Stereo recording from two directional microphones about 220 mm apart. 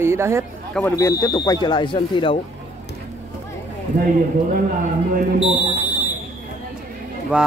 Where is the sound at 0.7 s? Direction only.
10° left (ahead or behind).